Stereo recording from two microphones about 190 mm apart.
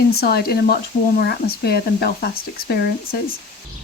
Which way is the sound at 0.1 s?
55° left (ahead or behind).